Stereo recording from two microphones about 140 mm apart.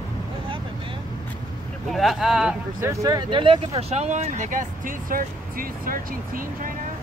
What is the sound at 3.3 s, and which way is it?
Speech, 35° right (ahead or behind).